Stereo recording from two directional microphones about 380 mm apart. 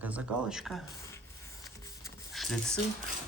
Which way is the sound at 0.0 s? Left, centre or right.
Centre.